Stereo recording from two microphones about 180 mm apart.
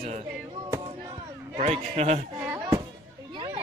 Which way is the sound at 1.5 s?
35° right (ahead or behind).